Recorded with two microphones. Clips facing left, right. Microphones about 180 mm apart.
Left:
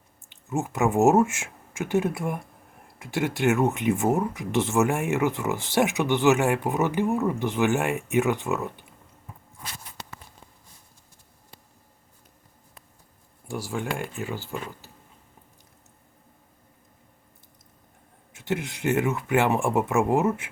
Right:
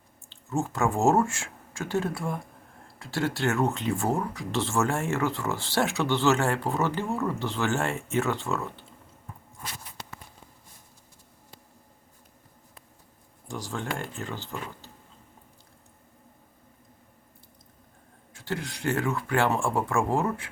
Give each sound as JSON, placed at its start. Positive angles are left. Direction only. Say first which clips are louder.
{"t": 0.3, "sound": "speech", "louder": "left 1 dB", "side_deg": 15}
{"t": 13.7, "sound": "speech", "louder": "left 3 dB", "side_deg": 15}
{"t": 18.3, "sound": "speech", "louder": "left 4 dB", "side_deg": 20}